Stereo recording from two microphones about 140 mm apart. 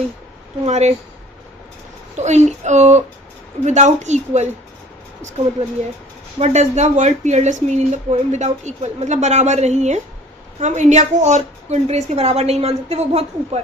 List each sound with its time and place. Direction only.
0.6 s a woman's voice: 55° right (ahead or behind)
2.1 s speech: 55° right (ahead or behind)
6.4 s a woman's voice: 55° right (ahead or behind)